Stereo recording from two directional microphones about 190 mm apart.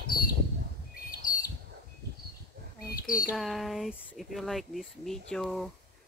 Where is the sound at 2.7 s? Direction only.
50° left (ahead or behind).